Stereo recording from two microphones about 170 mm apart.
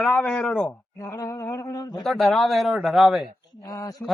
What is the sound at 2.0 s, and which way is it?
Speech, centre (ahead or behind).